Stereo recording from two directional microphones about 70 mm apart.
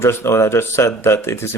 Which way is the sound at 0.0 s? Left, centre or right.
Left.